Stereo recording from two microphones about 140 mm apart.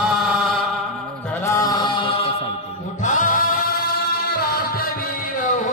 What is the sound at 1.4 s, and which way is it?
Mantra, 25° left (ahead or behind).